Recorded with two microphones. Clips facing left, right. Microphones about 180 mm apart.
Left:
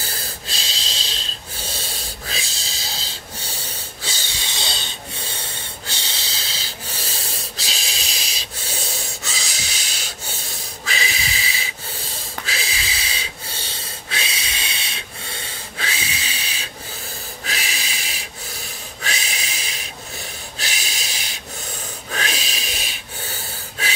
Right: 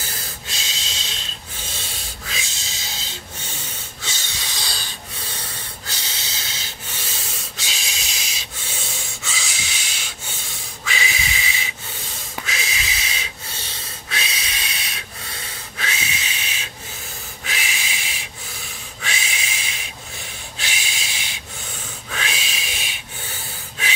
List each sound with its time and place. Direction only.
0.0 s snort: 35° left (ahead or behind)
19.0 s a sound: 40° left (ahead or behind)
20.5 s snort: 40° left (ahead or behind)